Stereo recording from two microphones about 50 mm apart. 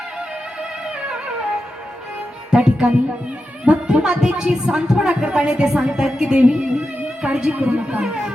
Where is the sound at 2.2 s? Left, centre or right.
Centre.